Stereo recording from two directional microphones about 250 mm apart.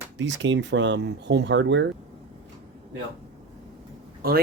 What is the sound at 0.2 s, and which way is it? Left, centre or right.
Speech, right.